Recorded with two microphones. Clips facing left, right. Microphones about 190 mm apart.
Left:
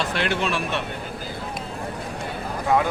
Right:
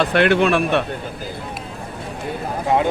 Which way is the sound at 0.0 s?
60° right (ahead or behind).